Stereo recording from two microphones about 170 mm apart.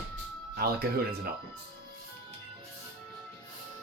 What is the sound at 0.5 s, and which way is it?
Speech, 65° right (ahead or behind).